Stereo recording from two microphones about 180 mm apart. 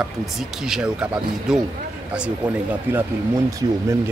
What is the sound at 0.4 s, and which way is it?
Speech, centre (ahead or behind).